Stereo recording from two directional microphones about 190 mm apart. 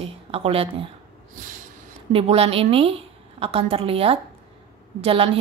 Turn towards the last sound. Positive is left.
turn(degrees=-30)  # may be behind; listen again after turning